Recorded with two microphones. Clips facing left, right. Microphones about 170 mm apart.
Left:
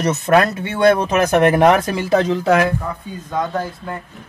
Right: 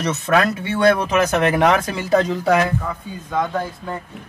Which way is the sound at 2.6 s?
10° left (ahead or behind).